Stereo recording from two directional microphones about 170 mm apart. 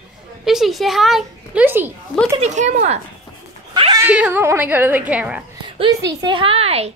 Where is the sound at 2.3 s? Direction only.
45° right (ahead or behind).